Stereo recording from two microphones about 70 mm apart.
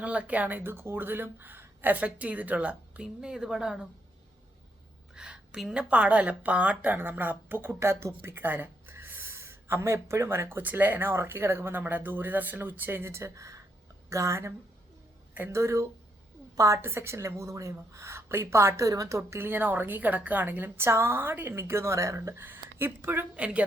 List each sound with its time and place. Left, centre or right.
0.0 s a woman's voice: centre
5.1 s a woman's voice: centre; by 16.8 s right
16.8 s a woman's voice: right
18.9 s a woman's voice: right
19.4 s a woman's voice: right
22.4 s speech: right
23.3 s a woman's voice: centre